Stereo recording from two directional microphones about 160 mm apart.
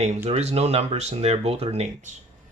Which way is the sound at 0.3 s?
40° right (ahead or behind).